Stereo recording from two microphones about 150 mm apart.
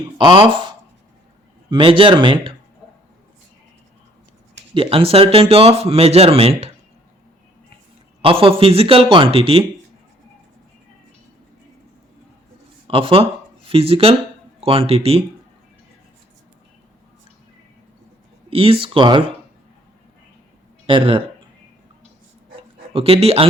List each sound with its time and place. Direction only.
0.2 s speech: 30° right (ahead or behind)
1.7 s speech: 35° right (ahead or behind)
4.7 s speech: 35° right (ahead or behind)
8.2 s speech: 40° right (ahead or behind)
12.9 s speech: 35° right (ahead or behind)
18.5 s speech: 40° right (ahead or behind)
20.8 s speech: 40° right (ahead or behind)
22.9 s speech: 40° right (ahead or behind)